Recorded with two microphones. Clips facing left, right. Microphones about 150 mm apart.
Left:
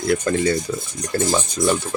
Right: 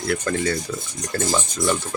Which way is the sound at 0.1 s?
25° left (ahead or behind).